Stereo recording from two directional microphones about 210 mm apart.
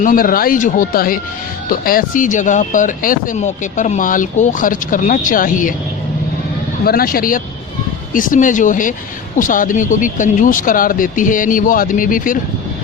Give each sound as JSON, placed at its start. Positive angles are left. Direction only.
{"t": 0.0, "sound": "speech", "side_deg": 40}
{"t": 6.8, "sound": "speech", "side_deg": 45}